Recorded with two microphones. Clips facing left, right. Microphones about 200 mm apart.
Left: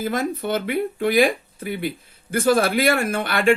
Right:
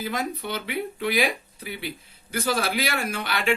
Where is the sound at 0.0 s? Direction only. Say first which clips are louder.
Left 6 dB; 50° left (ahead or behind).